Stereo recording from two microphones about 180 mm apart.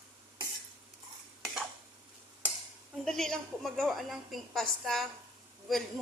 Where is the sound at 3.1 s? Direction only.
Centre (ahead or behind).